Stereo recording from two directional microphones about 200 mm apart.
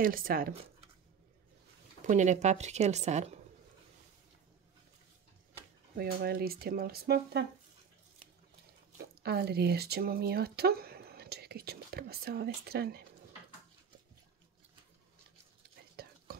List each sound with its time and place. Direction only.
0.0 s speech: 45° right (ahead or behind)
2.0 s speech: 35° right (ahead or behind)
5.9 s speech: 50° right (ahead or behind)
8.9 s speech: 55° right (ahead or behind)